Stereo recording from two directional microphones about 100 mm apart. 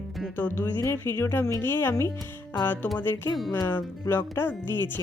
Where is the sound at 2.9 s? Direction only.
20° left (ahead or behind).